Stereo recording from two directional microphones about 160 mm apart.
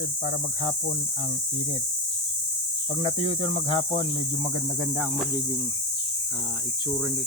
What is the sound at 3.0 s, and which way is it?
Speech, 35° left (ahead or behind).